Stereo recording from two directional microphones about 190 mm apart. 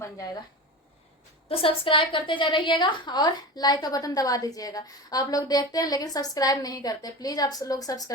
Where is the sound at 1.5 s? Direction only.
30° left (ahead or behind).